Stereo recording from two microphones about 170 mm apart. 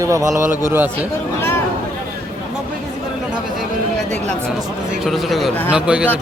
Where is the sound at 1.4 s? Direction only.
15° left (ahead or behind).